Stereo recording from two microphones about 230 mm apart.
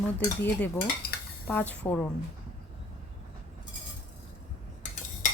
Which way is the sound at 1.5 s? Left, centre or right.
Centre.